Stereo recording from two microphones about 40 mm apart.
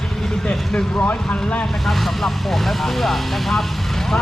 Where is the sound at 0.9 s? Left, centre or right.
Left.